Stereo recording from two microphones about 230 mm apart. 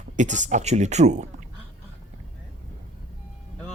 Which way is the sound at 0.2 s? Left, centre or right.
Right.